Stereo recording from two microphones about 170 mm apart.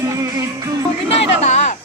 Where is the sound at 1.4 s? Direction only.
40° left (ahead or behind).